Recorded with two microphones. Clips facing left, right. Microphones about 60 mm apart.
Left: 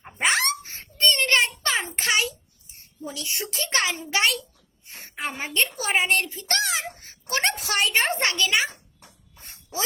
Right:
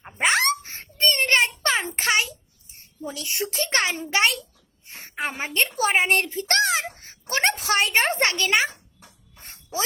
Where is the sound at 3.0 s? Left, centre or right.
Right.